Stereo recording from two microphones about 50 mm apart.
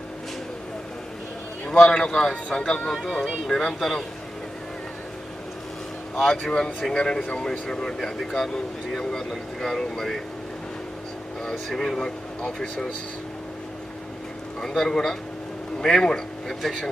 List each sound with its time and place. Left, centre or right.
1.6 s speech: centre
6.1 s speech: centre
6.5 s speech: left
11.5 s speech: centre
14.6 s speech: centre